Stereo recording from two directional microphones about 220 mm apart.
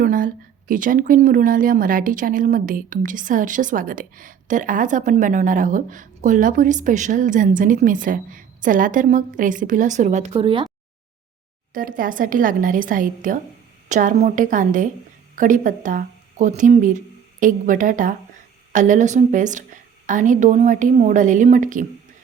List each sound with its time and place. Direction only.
0.0 s a woman's voice: 40° right (ahead or behind); by 10.7 s 25° right (ahead or behind)
11.7 s a woman's voice: 40° right (ahead or behind)